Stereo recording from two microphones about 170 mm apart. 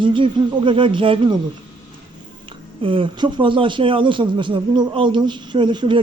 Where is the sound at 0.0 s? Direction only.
30° right (ahead or behind).